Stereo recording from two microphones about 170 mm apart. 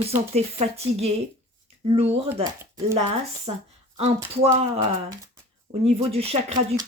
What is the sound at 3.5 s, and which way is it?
Speech, 35° right (ahead or behind).